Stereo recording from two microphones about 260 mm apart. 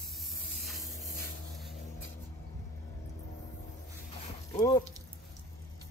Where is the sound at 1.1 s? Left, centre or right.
Left.